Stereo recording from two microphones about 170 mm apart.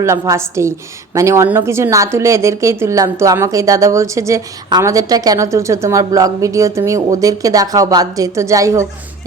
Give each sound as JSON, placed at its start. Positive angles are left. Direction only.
{"t": 0.0, "sound": "speech", "side_deg": -15}